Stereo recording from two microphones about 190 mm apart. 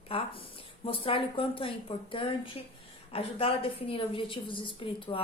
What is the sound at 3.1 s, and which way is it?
Speech, 30° left (ahead or behind).